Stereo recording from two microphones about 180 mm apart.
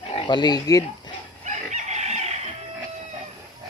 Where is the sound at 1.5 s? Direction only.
40° right (ahead or behind).